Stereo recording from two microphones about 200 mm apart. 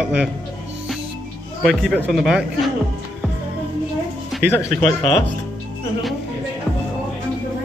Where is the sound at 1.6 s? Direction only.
Centre (ahead or behind).